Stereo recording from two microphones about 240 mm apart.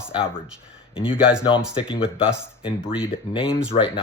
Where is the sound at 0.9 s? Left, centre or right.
Left.